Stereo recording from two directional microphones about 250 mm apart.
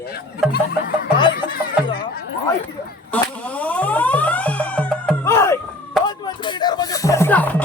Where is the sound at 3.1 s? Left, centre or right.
Centre.